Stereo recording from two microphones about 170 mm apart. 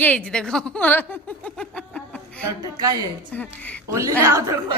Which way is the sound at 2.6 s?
20° right (ahead or behind).